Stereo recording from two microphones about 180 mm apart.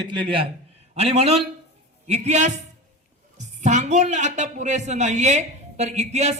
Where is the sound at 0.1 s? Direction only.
30° right (ahead or behind).